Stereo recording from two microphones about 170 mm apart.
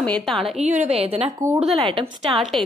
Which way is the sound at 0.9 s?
35° right (ahead or behind).